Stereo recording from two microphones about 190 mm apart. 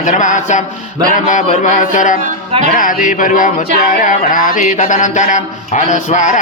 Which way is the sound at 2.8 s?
45° left (ahead or behind).